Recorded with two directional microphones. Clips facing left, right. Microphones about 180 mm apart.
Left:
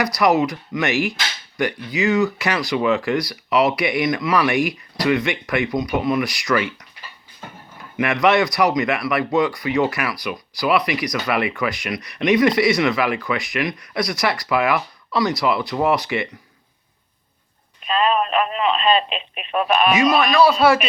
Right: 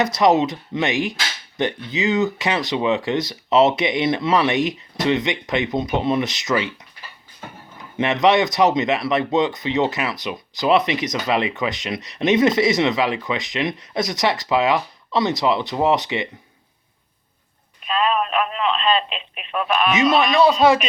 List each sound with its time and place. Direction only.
0.0 s speech: 25° right (ahead or behind)
7.9 s speech: 20° right (ahead or behind)
17.8 s speech: centre (ahead or behind); by 19.9 s 15° left (ahead or behind)
20.0 s speech: 20° right (ahead or behind)